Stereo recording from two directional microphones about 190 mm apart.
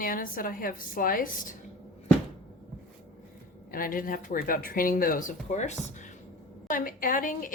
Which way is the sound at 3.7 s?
45° left (ahead or behind).